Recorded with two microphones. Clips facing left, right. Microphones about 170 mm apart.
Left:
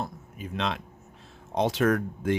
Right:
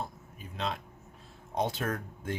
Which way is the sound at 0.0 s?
90° left.